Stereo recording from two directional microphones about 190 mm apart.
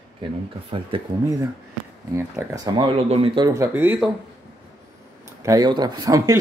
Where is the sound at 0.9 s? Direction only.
25° right (ahead or behind).